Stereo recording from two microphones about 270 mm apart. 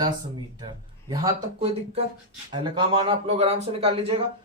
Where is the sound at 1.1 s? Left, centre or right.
Centre.